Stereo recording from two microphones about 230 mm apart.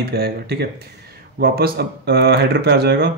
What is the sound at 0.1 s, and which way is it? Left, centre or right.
Speech, right.